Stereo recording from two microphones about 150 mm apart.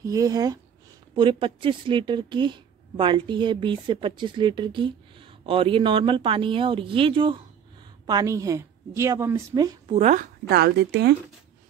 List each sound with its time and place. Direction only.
0.0 s a woman's voice: 25° right (ahead or behind)
8.1 s a woman's voice: 25° right (ahead or behind)
9.8 s a woman's voice: 50° right (ahead or behind); by 11.0 s 90° right